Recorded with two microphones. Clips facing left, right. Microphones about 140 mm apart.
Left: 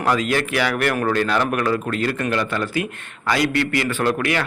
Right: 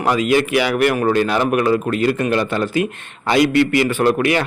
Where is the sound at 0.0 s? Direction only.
15° right (ahead or behind).